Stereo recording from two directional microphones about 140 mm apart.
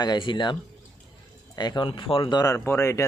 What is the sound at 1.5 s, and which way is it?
Speech, 30° left (ahead or behind).